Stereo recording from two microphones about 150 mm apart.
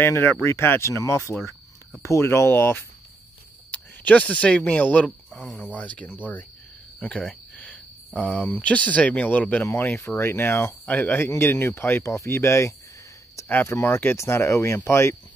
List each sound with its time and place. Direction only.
0.0 s speech: 15° left (ahead or behind)